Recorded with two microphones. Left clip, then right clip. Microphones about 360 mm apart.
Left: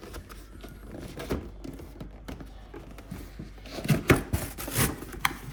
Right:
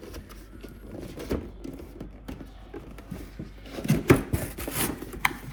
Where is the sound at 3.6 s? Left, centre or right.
Centre.